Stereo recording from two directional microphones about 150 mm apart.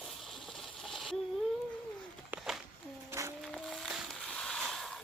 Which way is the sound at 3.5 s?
Centre (ahead or behind).